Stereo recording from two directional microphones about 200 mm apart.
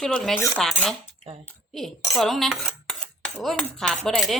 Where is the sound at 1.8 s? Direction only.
Centre (ahead or behind).